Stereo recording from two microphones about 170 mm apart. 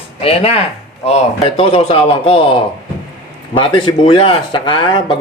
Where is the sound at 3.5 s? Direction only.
30° left (ahead or behind).